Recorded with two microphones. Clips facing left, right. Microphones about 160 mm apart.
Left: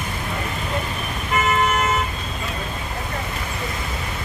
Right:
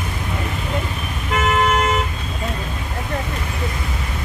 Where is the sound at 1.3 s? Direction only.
90° right.